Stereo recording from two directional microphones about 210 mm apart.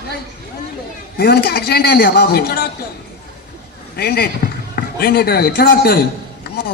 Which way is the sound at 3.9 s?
50° left (ahead or behind).